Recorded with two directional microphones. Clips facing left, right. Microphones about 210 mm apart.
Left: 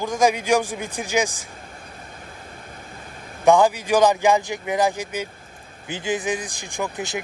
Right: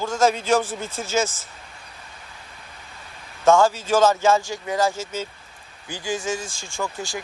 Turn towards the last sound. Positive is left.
turn(degrees=20)  # may be behind; listen again after turning